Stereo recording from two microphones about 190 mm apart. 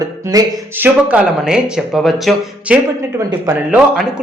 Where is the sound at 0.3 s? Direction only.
20° right (ahead or behind).